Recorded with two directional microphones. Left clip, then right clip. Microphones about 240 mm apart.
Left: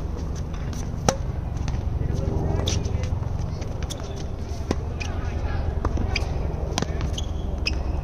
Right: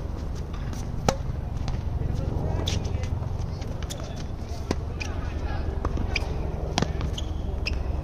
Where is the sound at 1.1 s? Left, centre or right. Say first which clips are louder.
Left 2 dB; centre.